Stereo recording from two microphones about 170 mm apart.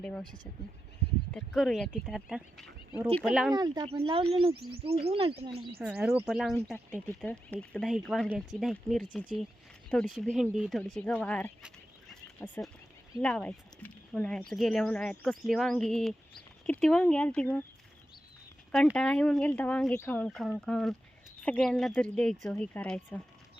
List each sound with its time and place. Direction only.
0.0 s speech: 5° left (ahead or behind)
3.5 s speech: 25° right (ahead or behind)
5.8 s speech: 5° right (ahead or behind)
18.9 s speech: 5° left (ahead or behind)